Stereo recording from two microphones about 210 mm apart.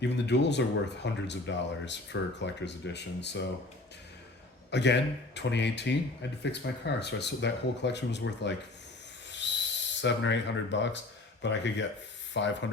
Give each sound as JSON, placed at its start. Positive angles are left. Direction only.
{"t": 0.0, "sound": "speech", "side_deg": 55}
{"t": 4.7, "sound": "speech", "side_deg": 55}
{"t": 9.4, "sound": "owl", "side_deg": 60}
{"t": 10.0, "sound": "speech", "side_deg": 60}